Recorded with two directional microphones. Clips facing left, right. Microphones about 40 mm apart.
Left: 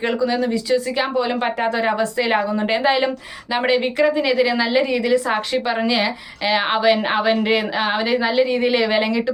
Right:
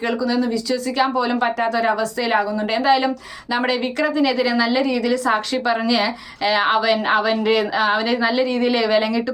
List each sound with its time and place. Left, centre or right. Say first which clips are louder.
0.3 s a woman's voice: left 1 dB; centre